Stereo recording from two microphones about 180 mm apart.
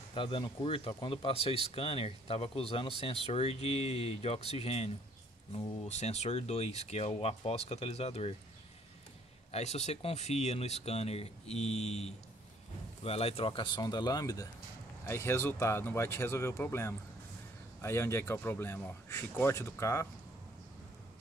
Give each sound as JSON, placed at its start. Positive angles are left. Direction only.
{"t": 0.1, "sound": "speech", "side_deg": 25}
{"t": 9.5, "sound": "speech", "side_deg": 40}